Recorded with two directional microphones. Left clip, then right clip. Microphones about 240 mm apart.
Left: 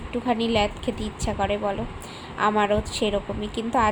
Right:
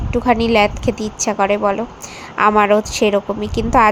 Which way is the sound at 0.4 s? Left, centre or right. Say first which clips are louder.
Right 9 dB; right.